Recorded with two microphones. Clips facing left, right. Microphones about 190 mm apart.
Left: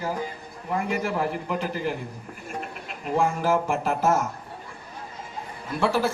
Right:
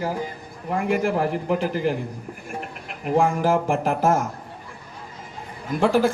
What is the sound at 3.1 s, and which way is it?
Speech, 50° right (ahead or behind).